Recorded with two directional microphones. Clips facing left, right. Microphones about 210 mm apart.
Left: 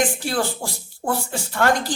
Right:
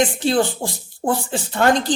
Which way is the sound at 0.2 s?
20° right (ahead or behind).